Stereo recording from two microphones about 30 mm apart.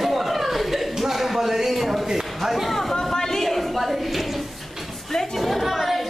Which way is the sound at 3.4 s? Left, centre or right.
Centre.